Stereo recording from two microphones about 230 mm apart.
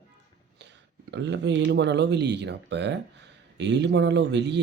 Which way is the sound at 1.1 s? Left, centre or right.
Right.